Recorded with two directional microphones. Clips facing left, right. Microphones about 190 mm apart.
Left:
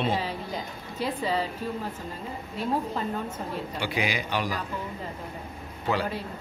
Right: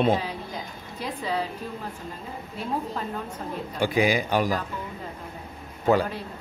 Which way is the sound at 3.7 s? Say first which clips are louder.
Right 8 dB; 45° right (ahead or behind).